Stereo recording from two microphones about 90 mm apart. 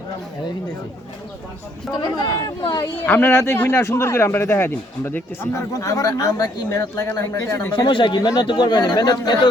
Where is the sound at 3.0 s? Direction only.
20° left (ahead or behind).